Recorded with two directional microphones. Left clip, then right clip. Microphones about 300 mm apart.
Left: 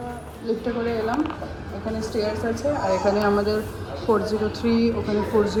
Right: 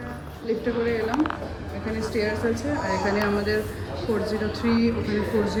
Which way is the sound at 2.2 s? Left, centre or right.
Centre.